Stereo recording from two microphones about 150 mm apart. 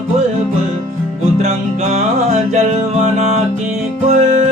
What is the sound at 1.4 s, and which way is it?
Music, 45° right (ahead or behind).